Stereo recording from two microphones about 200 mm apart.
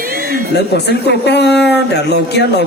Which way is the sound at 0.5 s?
60° left (ahead or behind).